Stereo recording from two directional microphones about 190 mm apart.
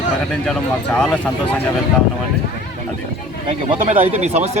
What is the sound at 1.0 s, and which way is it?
Speech, 5° left (ahead or behind).